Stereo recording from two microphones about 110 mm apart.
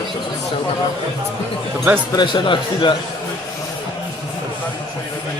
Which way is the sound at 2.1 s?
40° left (ahead or behind).